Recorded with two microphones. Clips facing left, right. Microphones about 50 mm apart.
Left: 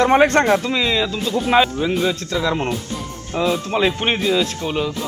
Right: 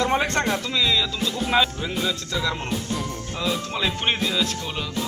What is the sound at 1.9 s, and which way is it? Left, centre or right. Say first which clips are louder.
Speech: left 6 dB; left.